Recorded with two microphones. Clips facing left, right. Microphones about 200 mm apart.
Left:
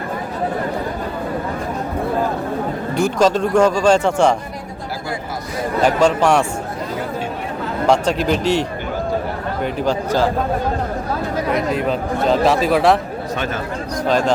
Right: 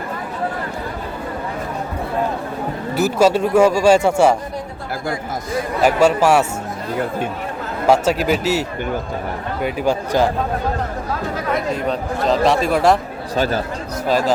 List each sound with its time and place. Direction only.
2.9 s speech: 5° right (ahead or behind)
5.8 s speech: 10° right (ahead or behind)
7.9 s speech: 5° right (ahead or behind)
9.6 s speech: 10° right (ahead or behind)
11.7 s speech: centre (ahead or behind)
13.3 s speech: 35° right (ahead or behind)
14.1 s speech: 5° right (ahead or behind)